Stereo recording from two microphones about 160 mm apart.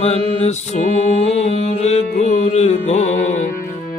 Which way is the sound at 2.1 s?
45° left (ahead or behind).